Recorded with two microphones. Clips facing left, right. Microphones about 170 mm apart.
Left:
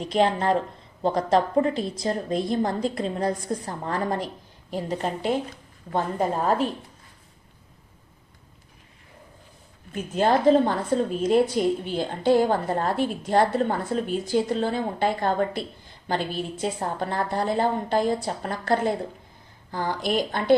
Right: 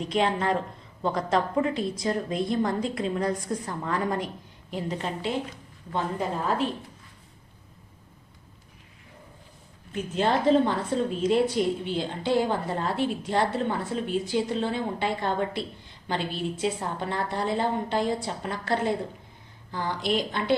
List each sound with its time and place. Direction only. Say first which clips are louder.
0.1 s a woman's voice: left 4 dB; 35° left (ahead or behind)
9.9 s a woman's voice: left 3 dB; 45° left (ahead or behind)